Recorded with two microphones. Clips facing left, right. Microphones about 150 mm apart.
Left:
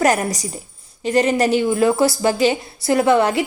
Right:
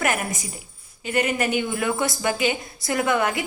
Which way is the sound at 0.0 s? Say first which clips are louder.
Left 8 dB; 40° left (ahead or behind).